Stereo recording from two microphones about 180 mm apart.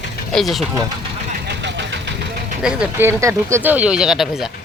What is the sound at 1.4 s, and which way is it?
Vehicle, 75° right (ahead or behind).